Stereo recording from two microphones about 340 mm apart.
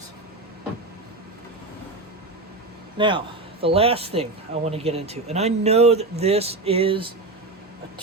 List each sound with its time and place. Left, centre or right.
3.0 s a man's voice: centre